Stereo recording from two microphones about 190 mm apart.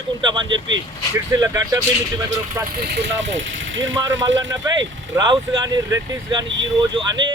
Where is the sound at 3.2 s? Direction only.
75° right (ahead or behind).